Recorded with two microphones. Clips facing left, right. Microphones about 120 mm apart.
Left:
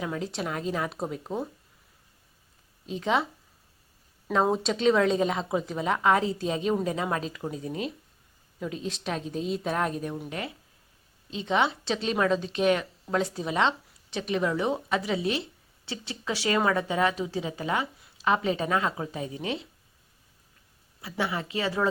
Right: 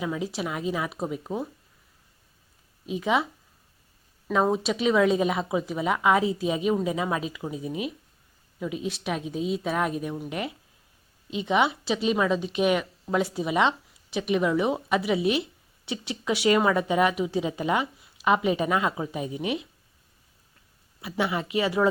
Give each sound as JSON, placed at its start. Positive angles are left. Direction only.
{"t": 0.0, "sound": "speech", "side_deg": -5}
{"t": 2.8, "sound": "speech", "side_deg": -10}
{"t": 4.4, "sound": "speech", "side_deg": -5}
{"t": 10.2, "sound": "speech", "side_deg": -20}
{"t": 21.0, "sound": "speech", "side_deg": -20}